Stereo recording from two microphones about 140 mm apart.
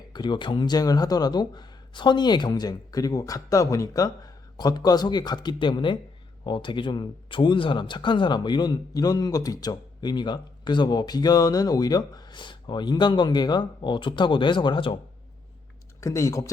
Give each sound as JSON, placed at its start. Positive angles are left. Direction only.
{"t": 0.1, "sound": "speech", "side_deg": 35}
{"t": 16.0, "sound": "speech", "side_deg": 20}